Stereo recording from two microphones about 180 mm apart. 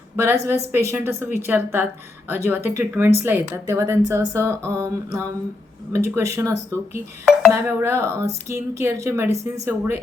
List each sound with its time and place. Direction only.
0.2 s a woman's voice: 15° right (ahead or behind)